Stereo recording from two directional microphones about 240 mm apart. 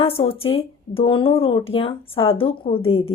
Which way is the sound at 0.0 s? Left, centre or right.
Left.